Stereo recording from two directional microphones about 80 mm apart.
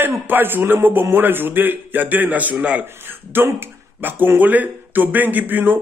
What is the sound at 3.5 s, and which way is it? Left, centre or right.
Speech, right.